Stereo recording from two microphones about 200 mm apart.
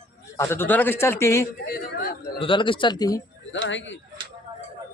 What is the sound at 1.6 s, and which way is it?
Speech, 50° left (ahead or behind).